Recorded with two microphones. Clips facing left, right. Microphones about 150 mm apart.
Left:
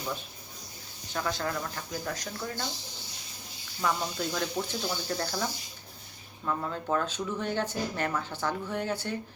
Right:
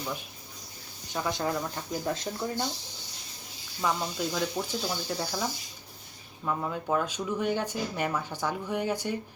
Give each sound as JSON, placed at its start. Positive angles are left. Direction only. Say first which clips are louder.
{"t": 1.1, "sound": "speech", "louder": "right 2 dB", "side_deg": -15}
{"t": 3.8, "sound": "speech", "louder": "right 1 dB", "side_deg": -5}